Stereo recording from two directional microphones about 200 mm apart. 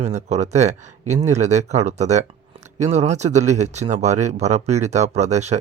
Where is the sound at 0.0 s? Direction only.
35° right (ahead or behind).